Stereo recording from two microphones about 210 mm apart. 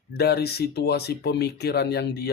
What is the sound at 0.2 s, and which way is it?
Speech, 50° left (ahead or behind).